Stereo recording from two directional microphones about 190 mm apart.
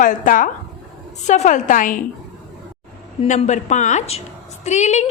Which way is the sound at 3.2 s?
40° left (ahead or behind).